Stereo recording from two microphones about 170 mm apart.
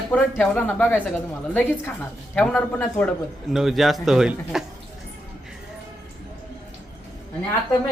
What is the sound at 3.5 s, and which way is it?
A man's voice, centre (ahead or behind).